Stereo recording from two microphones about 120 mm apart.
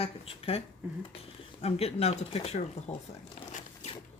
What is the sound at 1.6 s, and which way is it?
Speech, 55° left (ahead or behind).